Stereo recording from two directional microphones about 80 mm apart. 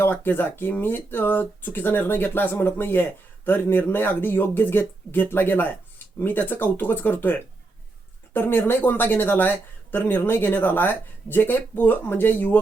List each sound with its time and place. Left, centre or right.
0.0 s speech: left